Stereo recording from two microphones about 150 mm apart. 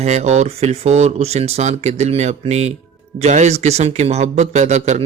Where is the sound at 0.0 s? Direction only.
50° right (ahead or behind).